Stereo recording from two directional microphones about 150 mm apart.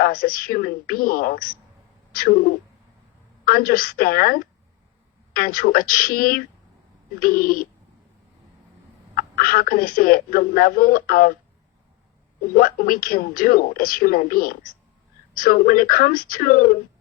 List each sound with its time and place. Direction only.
0.0 s speech: 75° left (ahead or behind)
3.4 s speech: 70° left (ahead or behind)
9.1 s speech: 75° left (ahead or behind)
12.5 s speech: 75° left (ahead or behind)